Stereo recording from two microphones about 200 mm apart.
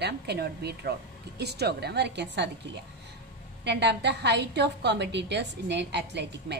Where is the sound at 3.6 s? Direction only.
60° right (ahead or behind).